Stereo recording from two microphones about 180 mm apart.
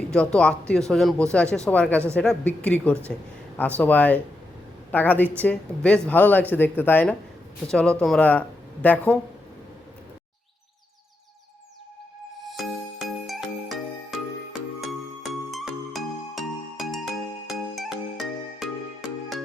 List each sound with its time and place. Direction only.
0.1 s speech: 5° left (ahead or behind)
13.2 s music: centre (ahead or behind)
15.3 s music: centre (ahead or behind)